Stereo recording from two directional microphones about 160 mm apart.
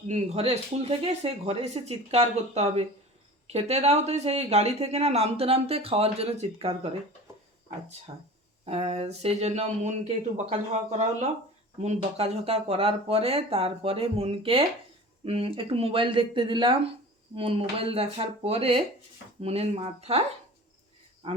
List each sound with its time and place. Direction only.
0.1 s speech: 45° right (ahead or behind)
8.1 s speech: 35° right (ahead or behind)